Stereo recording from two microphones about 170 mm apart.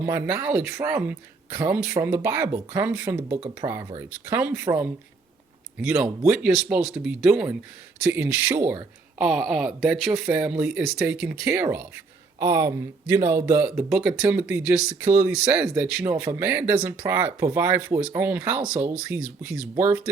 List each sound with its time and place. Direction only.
0.0 s speech: 15° right (ahead or behind)